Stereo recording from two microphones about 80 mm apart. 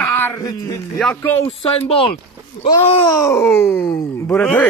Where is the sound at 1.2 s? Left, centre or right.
Left.